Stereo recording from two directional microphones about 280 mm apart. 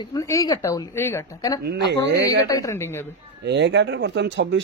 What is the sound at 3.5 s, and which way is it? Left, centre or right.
Speech, right.